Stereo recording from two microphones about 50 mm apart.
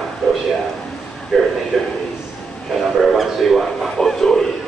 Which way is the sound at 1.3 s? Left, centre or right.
Centre.